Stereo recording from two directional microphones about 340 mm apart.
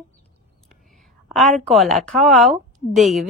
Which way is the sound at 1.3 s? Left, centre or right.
Centre.